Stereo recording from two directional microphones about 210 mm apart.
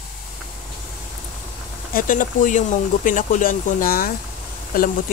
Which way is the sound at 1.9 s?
40° left (ahead or behind).